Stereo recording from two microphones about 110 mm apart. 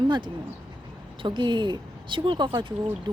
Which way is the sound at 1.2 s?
45° right (ahead or behind).